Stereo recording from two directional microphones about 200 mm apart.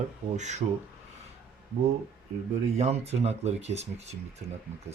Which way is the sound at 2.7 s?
35° right (ahead or behind).